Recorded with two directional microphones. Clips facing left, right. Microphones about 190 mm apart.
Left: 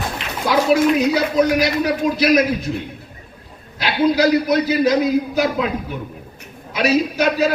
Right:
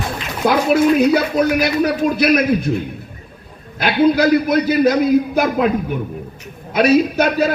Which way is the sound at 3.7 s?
50° right (ahead or behind).